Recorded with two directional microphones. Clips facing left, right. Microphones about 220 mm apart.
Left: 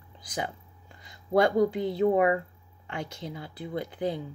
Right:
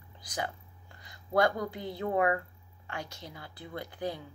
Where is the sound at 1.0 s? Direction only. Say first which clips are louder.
Left 4 dB; 25° left (ahead or behind).